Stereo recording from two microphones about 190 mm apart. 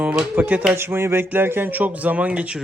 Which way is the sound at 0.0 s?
5° right (ahead or behind).